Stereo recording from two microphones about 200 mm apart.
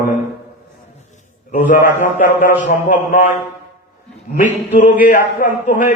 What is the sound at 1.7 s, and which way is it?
A man's voice, 40° left (ahead or behind).